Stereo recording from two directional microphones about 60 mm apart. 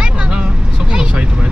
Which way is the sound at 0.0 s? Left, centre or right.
Centre.